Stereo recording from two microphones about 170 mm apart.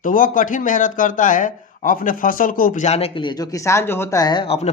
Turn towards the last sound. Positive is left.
turn(degrees=35)  # may be behind; listen again after turning